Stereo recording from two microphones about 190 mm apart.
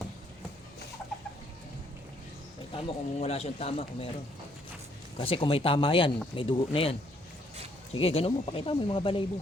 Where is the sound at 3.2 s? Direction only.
30° left (ahead or behind).